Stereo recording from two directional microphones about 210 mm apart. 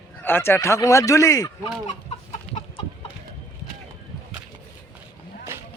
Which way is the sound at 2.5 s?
5° left (ahead or behind).